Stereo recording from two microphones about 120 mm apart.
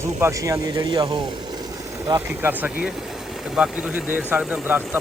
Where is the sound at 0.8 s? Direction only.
35° right (ahead or behind).